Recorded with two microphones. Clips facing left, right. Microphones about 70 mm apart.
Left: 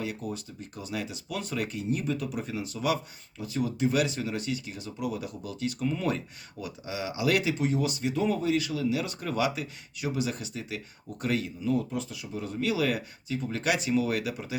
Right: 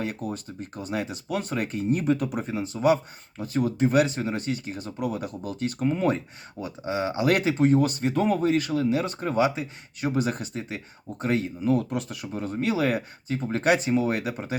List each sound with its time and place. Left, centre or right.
0.0 s speech: right
10.2 s speech: right
11.7 s speech: right